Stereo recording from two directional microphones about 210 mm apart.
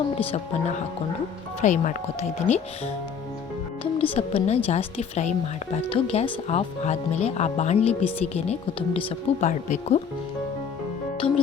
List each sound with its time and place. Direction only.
0.2 s a woman's voice: 25° left (ahead or behind)
1.6 s speech: 35° left (ahead or behind)
4.1 s a woman's voice: 30° left (ahead or behind)
11.2 s a woman's voice: 25° left (ahead or behind)